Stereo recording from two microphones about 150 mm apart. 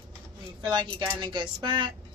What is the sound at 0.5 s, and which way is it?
Speech, 30° right (ahead or behind).